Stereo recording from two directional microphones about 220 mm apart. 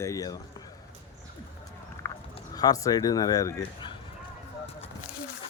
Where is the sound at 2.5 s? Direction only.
15° left (ahead or behind).